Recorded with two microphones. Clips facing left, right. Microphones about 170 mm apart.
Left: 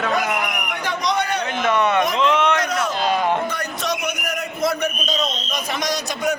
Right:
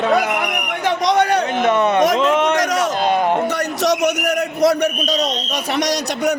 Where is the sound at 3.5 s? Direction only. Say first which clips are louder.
Right 7 dB; 75° right (ahead or behind).